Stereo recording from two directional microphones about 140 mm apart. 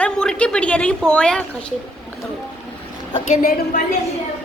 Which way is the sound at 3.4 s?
90° left.